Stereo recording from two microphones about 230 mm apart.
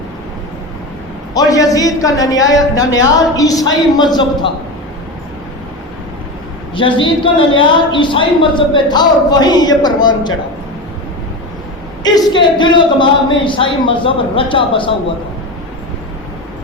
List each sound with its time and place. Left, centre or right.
1.3 s a man's voice: centre
6.7 s a woman's voice: left
12.0 s a woman's voice: centre